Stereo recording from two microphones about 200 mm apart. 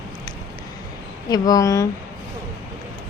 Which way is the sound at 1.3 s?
20° left (ahead or behind).